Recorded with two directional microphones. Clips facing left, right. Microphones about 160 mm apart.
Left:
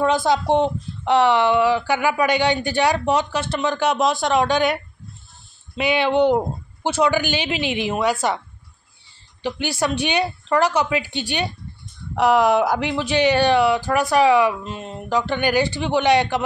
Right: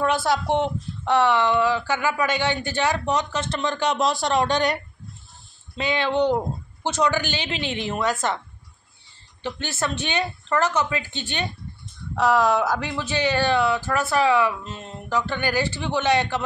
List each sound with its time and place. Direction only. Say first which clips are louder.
0.0 s speech: left 3 dB; 20° left (ahead or behind)
5.8 s speech: left 4 dB; 15° left (ahead or behind)
9.4 s speech: left 5 dB; 10° left (ahead or behind)